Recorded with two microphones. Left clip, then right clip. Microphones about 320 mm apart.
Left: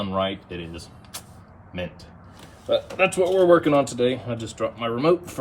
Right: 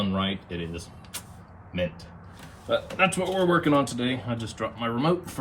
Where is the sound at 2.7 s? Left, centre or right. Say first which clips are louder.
Left 3 dB; centre.